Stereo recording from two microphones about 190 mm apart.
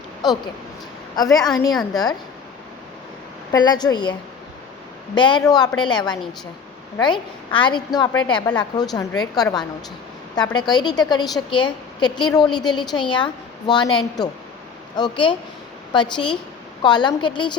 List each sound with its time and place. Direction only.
1.1 s a woman's voice: 20° left (ahead or behind)
1.7 s a woman's voice: centre (ahead or behind)
3.5 s a woman's voice: 20° left (ahead or behind)
5.1 s a woman's voice: 25° left (ahead or behind)